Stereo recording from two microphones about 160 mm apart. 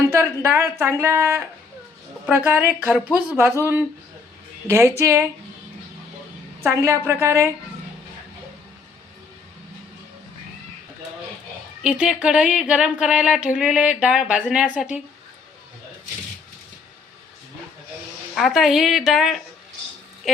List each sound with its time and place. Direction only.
0.1 s speech: 15° right (ahead or behind)
6.6 s speech: 15° right (ahead or behind)
11.8 s speech: 5° right (ahead or behind)
18.3 s a woman's voice: centre (ahead or behind)